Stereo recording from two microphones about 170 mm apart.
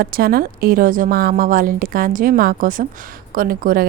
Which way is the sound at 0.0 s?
60° right (ahead or behind).